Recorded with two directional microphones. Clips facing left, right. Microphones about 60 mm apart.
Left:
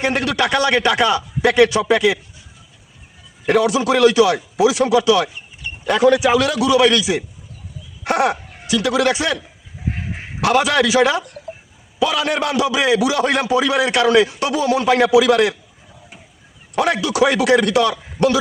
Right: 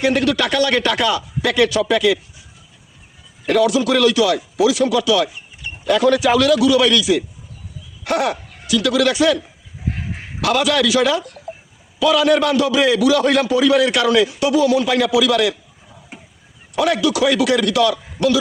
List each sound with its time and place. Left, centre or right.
0.0 s a man's voice: left
3.4 s a man's voice: left
10.4 s a man's voice: left
16.7 s a man's voice: left